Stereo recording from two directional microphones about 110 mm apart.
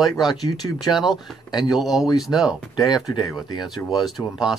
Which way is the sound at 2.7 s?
40° left (ahead or behind).